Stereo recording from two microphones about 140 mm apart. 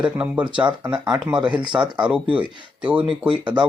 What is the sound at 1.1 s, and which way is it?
Speech, 10° right (ahead or behind).